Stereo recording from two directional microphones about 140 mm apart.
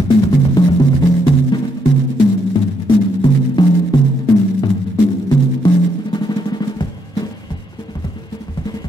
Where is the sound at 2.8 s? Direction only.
35° left (ahead or behind).